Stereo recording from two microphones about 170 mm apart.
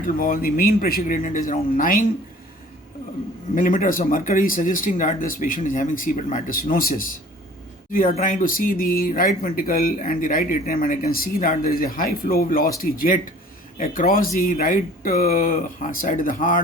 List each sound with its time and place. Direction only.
0.2 s speech: 55° left (ahead or behind)
3.5 s speech: 55° left (ahead or behind)
8.1 s speech: 50° left (ahead or behind)